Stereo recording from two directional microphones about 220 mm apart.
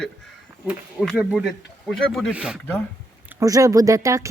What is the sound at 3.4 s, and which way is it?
Speech, 15° right (ahead or behind).